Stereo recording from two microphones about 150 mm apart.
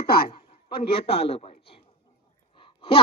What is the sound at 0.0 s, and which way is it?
Speech, 90° left.